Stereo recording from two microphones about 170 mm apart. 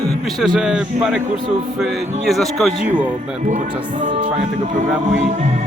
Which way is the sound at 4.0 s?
50° right (ahead or behind).